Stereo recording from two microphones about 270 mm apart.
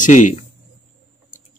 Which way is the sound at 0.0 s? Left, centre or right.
Left.